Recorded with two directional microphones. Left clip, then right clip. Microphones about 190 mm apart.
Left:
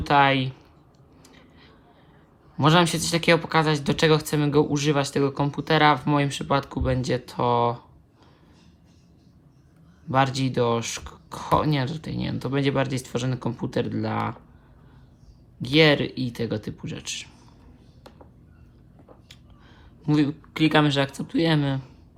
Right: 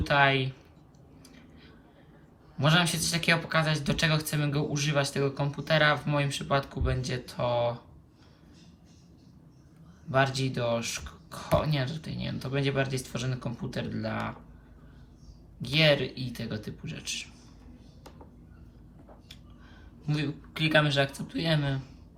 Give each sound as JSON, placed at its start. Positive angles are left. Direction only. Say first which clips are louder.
{"t": 0.0, "sound": "speech", "louder": "left 5 dB", "side_deg": 30}
{"t": 2.6, "sound": "speech", "louder": "left 6 dB", "side_deg": 30}
{"t": 10.1, "sound": "speech", "louder": "left 4 dB", "side_deg": 35}
{"t": 15.6, "sound": "speech", "louder": "left 5 dB", "side_deg": 35}
{"t": 20.0, "sound": "speech", "louder": "left 11 dB", "side_deg": 35}